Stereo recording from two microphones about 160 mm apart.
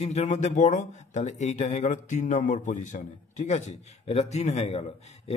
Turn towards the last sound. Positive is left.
turn(degrees=40)  # may be behind; listen again after turning